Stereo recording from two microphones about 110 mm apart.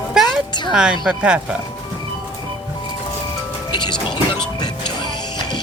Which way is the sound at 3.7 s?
45° left (ahead or behind).